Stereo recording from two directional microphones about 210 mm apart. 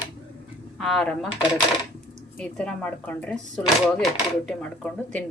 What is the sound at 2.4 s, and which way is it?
A woman's voice, 5° left (ahead or behind).